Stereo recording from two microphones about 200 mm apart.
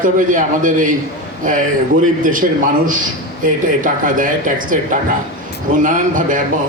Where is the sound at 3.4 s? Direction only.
40° right (ahead or behind).